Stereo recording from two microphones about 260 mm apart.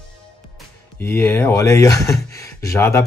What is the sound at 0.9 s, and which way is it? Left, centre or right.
Speech, centre.